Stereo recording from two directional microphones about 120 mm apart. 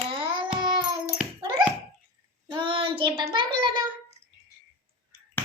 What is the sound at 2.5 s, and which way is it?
Child singing, 40° right (ahead or behind).